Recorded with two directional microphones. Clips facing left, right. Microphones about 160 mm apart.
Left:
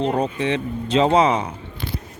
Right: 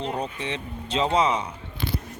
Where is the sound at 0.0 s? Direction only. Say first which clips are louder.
Left 8 dB; 65° left (ahead or behind).